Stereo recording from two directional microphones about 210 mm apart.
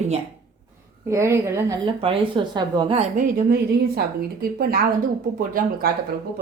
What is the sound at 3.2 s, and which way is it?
Speech, 45° right (ahead or behind).